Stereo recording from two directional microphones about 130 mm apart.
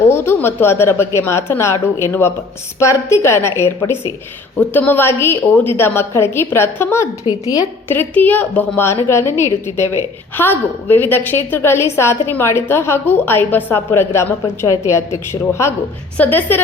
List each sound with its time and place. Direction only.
0.1 s a woman's voice: 20° left (ahead or behind)
7.3 s a woman's voice: 30° left (ahead or behind)
7.9 s a woman's voice: 15° left (ahead or behind)